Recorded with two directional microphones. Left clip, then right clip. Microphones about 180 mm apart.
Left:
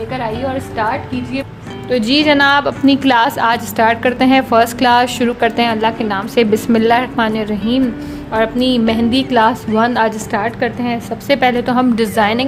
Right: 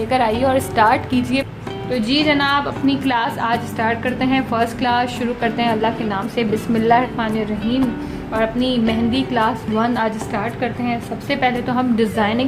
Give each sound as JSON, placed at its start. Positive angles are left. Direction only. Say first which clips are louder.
{"t": 0.1, "sound": "a woman's voice", "louder": "right 6 dB", "side_deg": -50}
{"t": 1.9, "sound": "a woman's voice", "louder": "left 5 dB", "side_deg": 55}